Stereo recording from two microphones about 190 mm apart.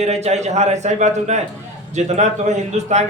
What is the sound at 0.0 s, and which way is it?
A man's voice, 35° right (ahead or behind).